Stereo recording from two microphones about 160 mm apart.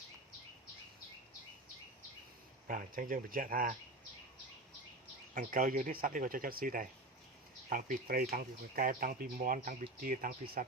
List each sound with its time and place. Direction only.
2.6 s speech: 60° right (ahead or behind)
5.3 s speech: 55° right (ahead or behind)